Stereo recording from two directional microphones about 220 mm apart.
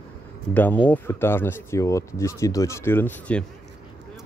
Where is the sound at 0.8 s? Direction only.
10° left (ahead or behind).